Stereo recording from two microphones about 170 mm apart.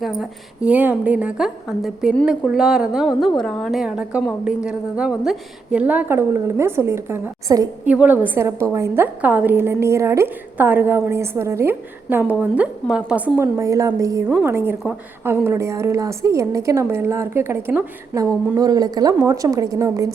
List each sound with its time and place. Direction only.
0.0 s a woman's voice: centre (ahead or behind); by 7.7 s 20° right (ahead or behind)
7.9 s a woman's voice: 10° right (ahead or behind)